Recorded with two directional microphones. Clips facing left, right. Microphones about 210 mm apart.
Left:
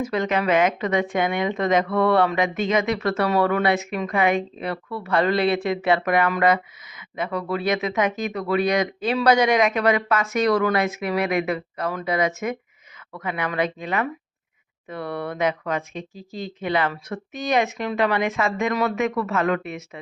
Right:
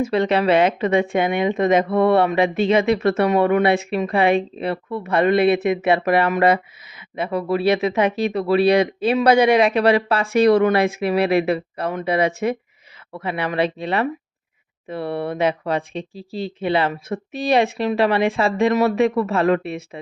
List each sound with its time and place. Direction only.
0.0 s speech: 30° right (ahead or behind)